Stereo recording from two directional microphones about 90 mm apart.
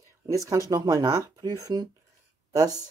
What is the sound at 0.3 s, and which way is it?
Speech, 40° right (ahead or behind).